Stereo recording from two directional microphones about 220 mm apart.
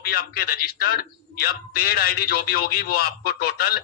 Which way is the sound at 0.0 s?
45° left (ahead or behind).